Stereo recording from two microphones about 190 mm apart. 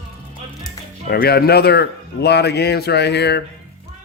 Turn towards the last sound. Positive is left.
turn(degrees=60)  # may be behind; listen again after turning